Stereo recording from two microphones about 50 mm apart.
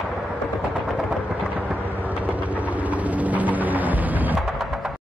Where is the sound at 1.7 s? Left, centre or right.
Right.